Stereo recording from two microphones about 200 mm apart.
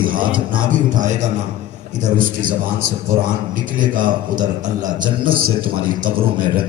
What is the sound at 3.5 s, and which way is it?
A man's voice, 40° right (ahead or behind).